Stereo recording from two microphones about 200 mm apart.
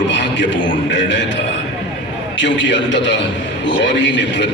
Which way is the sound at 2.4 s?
65° left (ahead or behind).